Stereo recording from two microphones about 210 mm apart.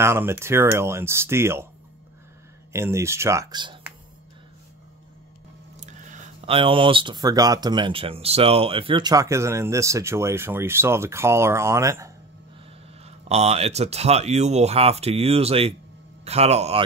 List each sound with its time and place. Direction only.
0.0 s speech: 10° right (ahead or behind)
2.7 s speech: 15° right (ahead or behind)
5.8 s speech: 35° right (ahead or behind); by 12.1 s 15° right (ahead or behind)
13.0 s speech: 30° right (ahead or behind)